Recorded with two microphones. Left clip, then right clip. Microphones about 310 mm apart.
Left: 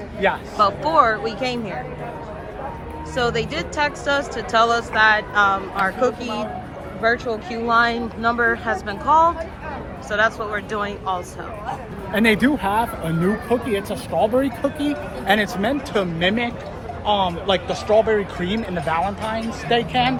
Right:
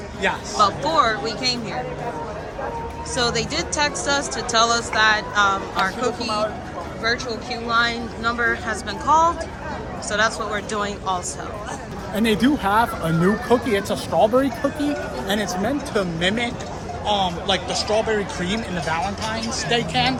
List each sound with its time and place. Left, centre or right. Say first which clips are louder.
0.2 s speech: left 2 dB; left
0.6 s a woman's voice: left 2 dB; centre
3.2 s a woman's voice: left 1 dB; centre
7.5 s a woman's voice: left 3 dB; centre
12.1 s speech: left 3 dB; centre
12.6 s a woman's voice: right 2 dB; centre
15.3 s speech: left 5 dB; left